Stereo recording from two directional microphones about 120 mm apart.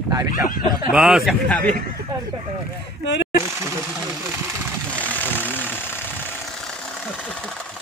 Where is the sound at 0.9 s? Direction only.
5° right (ahead or behind).